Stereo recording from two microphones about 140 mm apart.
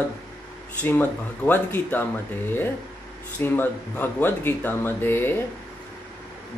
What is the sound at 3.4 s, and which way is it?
Speech, 15° left (ahead or behind).